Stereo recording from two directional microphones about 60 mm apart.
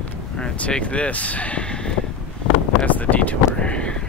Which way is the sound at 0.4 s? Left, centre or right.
Centre.